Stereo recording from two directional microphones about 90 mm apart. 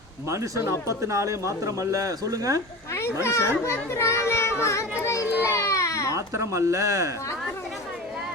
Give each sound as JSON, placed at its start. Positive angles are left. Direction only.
{"t": 0.3, "sound": "speech", "side_deg": -35}
{"t": 3.2, "sound": "a child's voice", "side_deg": 30}
{"t": 6.1, "sound": "speech", "side_deg": -35}